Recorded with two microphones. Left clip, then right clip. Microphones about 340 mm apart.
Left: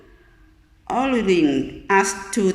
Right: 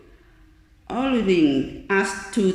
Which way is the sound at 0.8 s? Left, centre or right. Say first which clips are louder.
Left 3 dB; centre.